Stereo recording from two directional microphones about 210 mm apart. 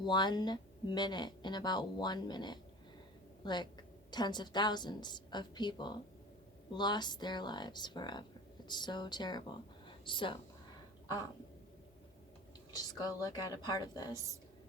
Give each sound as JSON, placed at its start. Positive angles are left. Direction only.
{"t": 0.0, "sound": "speech", "side_deg": 20}
{"t": 9.8, "sound": "a sound", "side_deg": 25}
{"t": 12.7, "sound": "speech", "side_deg": 20}